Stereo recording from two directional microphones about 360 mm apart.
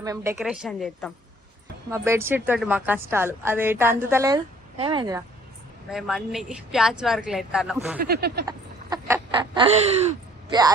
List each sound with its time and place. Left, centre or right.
0.0 s a woman's voice: centre
5.9 s speech: centre
8.0 s speech: right
8.4 s a sound: centre
10.5 s a woman's voice: centre